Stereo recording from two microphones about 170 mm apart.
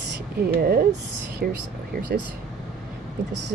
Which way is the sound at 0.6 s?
60° right (ahead or behind).